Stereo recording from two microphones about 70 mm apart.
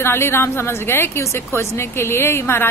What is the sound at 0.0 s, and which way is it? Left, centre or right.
A woman's voice, left.